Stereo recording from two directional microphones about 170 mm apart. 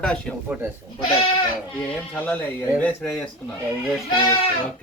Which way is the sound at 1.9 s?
10° left (ahead or behind).